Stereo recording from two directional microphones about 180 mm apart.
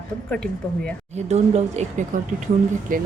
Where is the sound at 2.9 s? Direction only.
50° right (ahead or behind).